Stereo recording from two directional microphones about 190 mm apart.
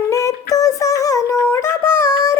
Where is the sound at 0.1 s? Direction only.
15° left (ahead or behind).